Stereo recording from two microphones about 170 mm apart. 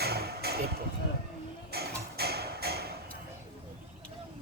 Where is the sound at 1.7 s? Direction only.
70° right (ahead or behind).